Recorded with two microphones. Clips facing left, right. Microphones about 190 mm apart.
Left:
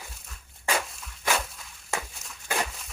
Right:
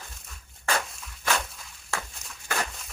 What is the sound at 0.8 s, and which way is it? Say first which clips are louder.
Walk: left 1 dB; centre (ahead or behind).